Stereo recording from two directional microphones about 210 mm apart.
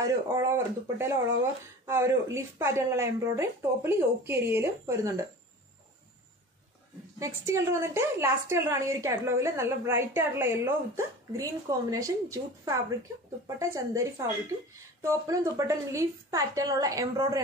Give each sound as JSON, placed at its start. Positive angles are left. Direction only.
{"t": 0.0, "sound": "speech", "side_deg": -15}
{"t": 7.2, "sound": "speech", "side_deg": -15}